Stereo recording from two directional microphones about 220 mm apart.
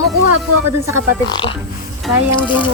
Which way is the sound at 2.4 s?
20° left (ahead or behind).